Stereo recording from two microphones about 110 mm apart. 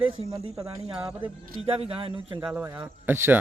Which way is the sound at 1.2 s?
55° right (ahead or behind).